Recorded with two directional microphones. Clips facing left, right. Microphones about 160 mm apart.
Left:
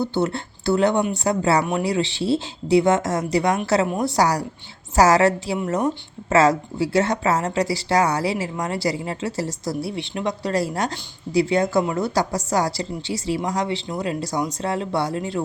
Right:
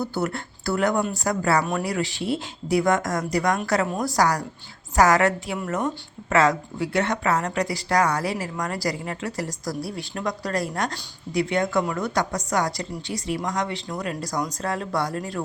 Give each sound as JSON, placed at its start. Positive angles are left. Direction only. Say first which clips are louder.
{"t": 0.0, "sound": "a woman's voice", "louder": "left 4 dB", "side_deg": 25}